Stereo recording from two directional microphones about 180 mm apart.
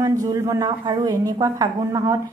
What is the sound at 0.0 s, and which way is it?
A woman's voice, 20° right (ahead or behind).